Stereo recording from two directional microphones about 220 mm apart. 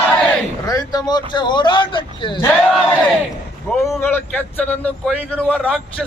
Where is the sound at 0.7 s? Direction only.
15° left (ahead or behind).